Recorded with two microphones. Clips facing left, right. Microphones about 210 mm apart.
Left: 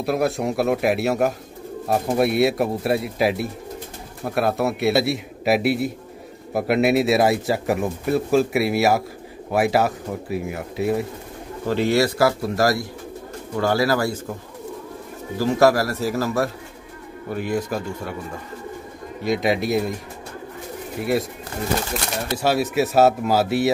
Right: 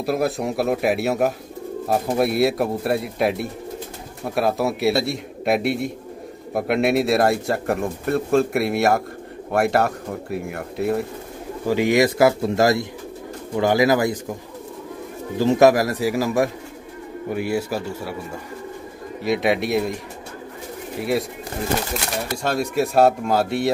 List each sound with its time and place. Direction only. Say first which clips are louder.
0.0 s speech: even; centre (ahead or behind)
11.6 s speech: right 2 dB; 15° right (ahead or behind)
15.3 s speech: right 2 dB; 20° right (ahead or behind)
19.2 s speech: even; centre (ahead or behind)
21.0 s speech: even; centre (ahead or behind)
22.4 s speech: left 2 dB; 5° left (ahead or behind)